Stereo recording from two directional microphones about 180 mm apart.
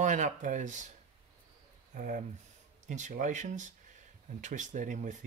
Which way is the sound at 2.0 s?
45° right (ahead or behind).